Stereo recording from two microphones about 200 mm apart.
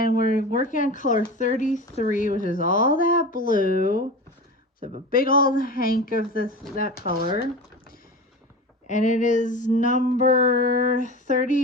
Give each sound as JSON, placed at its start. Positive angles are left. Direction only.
{"t": 0.0, "sound": "speech", "side_deg": 45}
{"t": 5.1, "sound": "speech", "side_deg": 45}
{"t": 8.9, "sound": "music", "side_deg": 40}